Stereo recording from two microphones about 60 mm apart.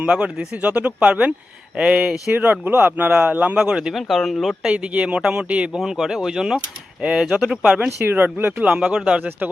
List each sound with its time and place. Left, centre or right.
0.1 s speech: right
2.3 s speech: right
3.6 s speech: centre
3.9 s speech: centre
4.7 s speech: right
5.8 s speech: centre
7.9 s speech: right
8.6 s speech: right